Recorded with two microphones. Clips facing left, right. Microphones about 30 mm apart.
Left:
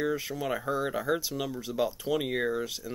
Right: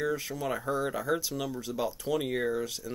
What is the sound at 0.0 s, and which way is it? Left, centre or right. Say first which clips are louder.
Speech: left 1 dB; centre.